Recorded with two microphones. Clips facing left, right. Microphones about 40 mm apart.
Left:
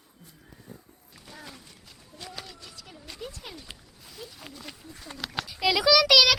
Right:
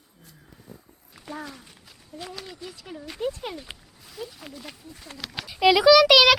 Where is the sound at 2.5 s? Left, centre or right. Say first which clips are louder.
Right 7 dB; centre.